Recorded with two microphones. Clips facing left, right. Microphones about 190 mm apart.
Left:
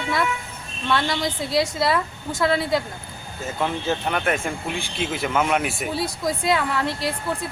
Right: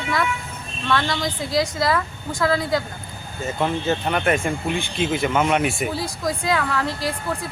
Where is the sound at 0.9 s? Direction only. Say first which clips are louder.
Even; 25° left (ahead or behind).